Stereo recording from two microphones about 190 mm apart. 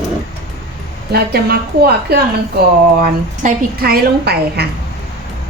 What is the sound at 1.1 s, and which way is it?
A woman's voice, 55° right (ahead or behind).